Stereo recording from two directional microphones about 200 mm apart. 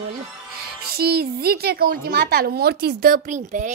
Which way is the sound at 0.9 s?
50° right (ahead or behind).